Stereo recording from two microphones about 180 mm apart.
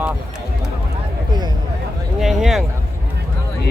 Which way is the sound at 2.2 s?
Centre (ahead or behind).